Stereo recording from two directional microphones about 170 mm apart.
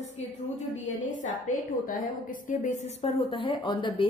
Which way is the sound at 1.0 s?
50° left (ahead or behind).